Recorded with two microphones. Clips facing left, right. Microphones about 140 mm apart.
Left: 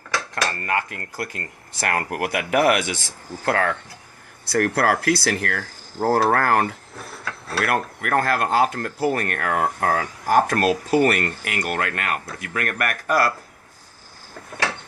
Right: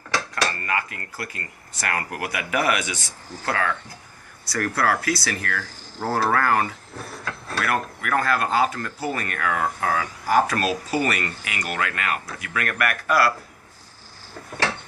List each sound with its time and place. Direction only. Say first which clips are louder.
0.3 s cutlery: left 4 dB; 50° left (ahead or behind)
5.6 s speech: left 5 dB; 45° left (ahead or behind)
6.4 s cutlery: left 2 dB; 65° left (ahead or behind)
7.6 s speech: left 2 dB; 55° left (ahead or behind)